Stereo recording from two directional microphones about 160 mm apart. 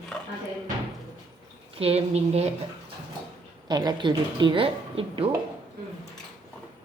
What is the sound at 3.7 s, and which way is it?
Speech, 25° right (ahead or behind).